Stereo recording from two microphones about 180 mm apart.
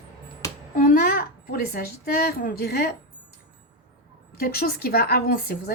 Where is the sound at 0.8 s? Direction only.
50° left (ahead or behind).